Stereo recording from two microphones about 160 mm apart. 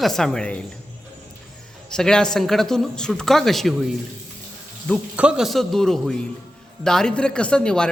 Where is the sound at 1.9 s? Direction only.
5° left (ahead or behind).